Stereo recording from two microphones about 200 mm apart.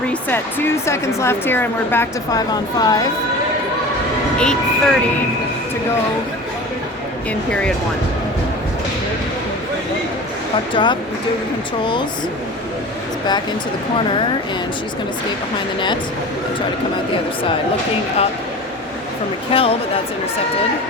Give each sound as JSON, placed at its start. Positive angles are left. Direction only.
{"t": 0.1, "sound": "speech", "side_deg": 10}
{"t": 4.4, "sound": "speech", "side_deg": 5}
{"t": 10.8, "sound": "a woman's voice", "side_deg": 25}
{"t": 19.5, "sound": "a woman's voice", "side_deg": 25}